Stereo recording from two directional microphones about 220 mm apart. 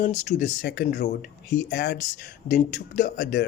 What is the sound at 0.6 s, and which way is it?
Speech, 50° left (ahead or behind).